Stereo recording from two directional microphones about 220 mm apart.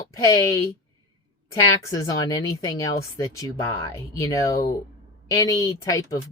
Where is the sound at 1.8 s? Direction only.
15° left (ahead or behind).